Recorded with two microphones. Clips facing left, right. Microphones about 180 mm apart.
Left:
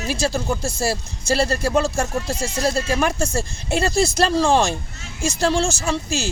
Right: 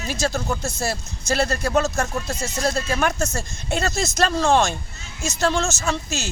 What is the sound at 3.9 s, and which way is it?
Speech, 30° left (ahead or behind).